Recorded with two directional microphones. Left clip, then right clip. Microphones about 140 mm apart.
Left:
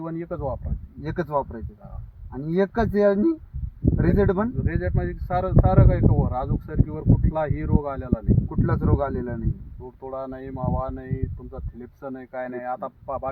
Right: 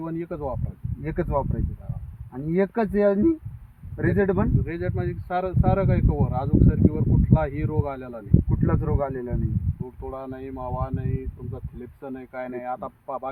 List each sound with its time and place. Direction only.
0.0 s speech: 10° left (ahead or behind)
1.0 s speech: 10° right (ahead or behind)
4.6 s speech: 15° left (ahead or behind)
8.4 s speech: 10° right (ahead or behind)
9.8 s speech: 10° left (ahead or behind)